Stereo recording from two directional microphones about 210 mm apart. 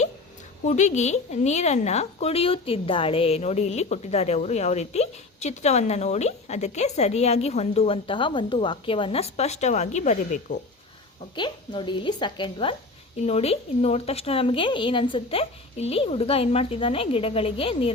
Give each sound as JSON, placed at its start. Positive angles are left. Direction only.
{"t": 0.6, "sound": "a woman's voice", "side_deg": 35}
{"t": 11.3, "sound": "a woman's voice", "side_deg": 20}